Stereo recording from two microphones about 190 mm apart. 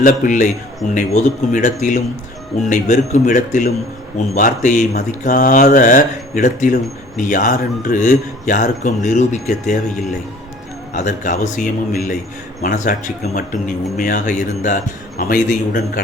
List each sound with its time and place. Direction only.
0.0 s a man's voice: 40° left (ahead or behind)
10.9 s a man's voice: 40° left (ahead or behind)